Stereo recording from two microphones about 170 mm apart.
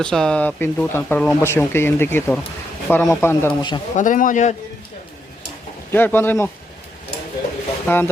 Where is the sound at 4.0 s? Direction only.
50° left (ahead or behind).